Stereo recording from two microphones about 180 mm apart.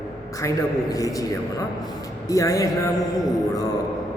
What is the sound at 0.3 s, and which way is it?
A man's voice, 20° left (ahead or behind).